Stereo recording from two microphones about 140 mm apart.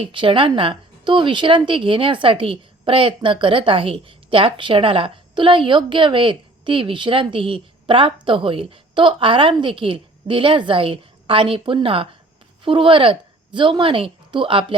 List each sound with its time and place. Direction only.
0.0 s a woman's voice: 40° right (ahead or behind)